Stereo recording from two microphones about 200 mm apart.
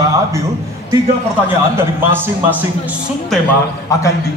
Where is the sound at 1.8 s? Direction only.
10° right (ahead or behind).